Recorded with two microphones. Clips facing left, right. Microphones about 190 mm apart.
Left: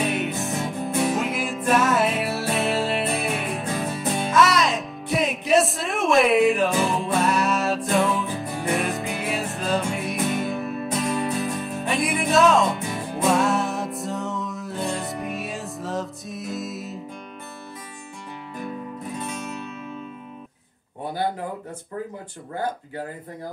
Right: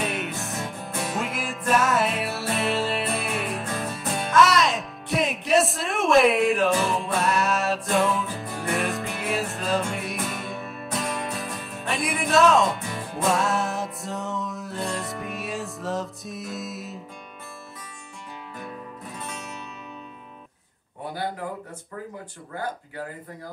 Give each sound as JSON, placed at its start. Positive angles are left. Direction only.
{"t": 0.0, "sound": "music", "side_deg": 0}
{"t": 19.2, "sound": "music", "side_deg": 0}